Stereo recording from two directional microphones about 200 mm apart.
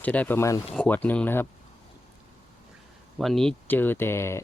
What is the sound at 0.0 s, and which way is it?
Speech, 10° left (ahead or behind).